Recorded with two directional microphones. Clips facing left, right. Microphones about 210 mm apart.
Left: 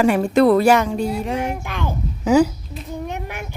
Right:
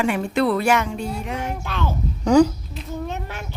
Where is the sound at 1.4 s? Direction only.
15° left (ahead or behind).